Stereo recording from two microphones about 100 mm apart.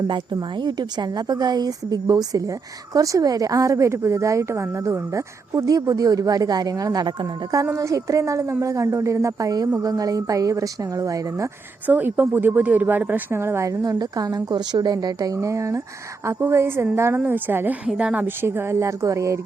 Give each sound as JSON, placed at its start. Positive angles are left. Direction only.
{"t": 0.5, "sound": "a woman's voice", "side_deg": -45}
{"t": 7.6, "sound": "a woman's voice", "side_deg": -30}
{"t": 11.9, "sound": "a woman's voice", "side_deg": -20}
{"t": 18.4, "sound": "speech", "side_deg": -25}